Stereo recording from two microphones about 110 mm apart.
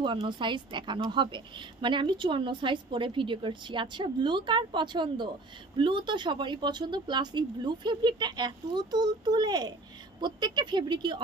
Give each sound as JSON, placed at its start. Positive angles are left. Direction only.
{"t": 0.0, "sound": "a woman's voice", "side_deg": -45}